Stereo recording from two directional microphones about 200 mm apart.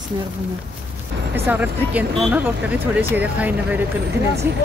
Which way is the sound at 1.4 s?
10° right (ahead or behind).